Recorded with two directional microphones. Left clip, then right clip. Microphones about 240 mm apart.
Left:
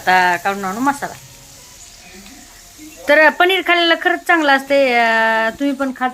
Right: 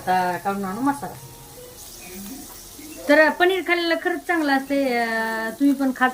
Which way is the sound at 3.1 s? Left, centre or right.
Centre.